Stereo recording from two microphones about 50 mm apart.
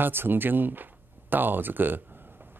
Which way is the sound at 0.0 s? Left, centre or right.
Right.